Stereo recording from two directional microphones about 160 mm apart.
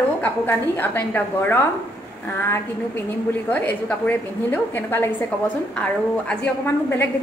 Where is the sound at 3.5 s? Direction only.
10° left (ahead or behind).